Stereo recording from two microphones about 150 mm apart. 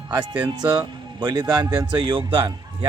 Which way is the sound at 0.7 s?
25° right (ahead or behind).